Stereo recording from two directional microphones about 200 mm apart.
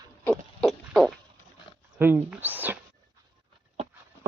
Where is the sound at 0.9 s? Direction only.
Centre (ahead or behind).